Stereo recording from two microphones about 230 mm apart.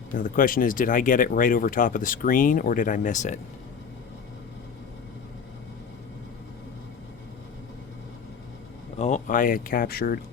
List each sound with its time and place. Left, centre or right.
0.1 s speech: left
9.0 s speech: left